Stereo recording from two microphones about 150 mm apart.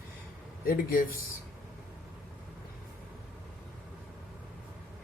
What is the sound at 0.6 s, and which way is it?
Speech, 70° left (ahead or behind).